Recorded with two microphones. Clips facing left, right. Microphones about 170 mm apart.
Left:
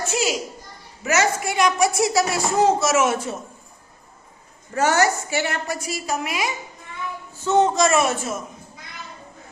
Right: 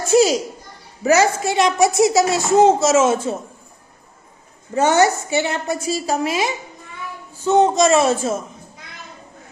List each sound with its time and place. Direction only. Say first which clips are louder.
0.1 s children playing: right 12 dB; 35° right (ahead or behind)
1.0 s a child's voice: right 6 dB; 30° right (ahead or behind)
4.7 s a child's voice: right 4 dB; 20° right (ahead or behind)
7.4 s a child's voice: right 3 dB; 15° right (ahead or behind)